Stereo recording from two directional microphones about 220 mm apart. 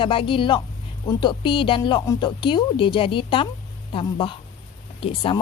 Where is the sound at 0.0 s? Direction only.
25° left (ahead or behind).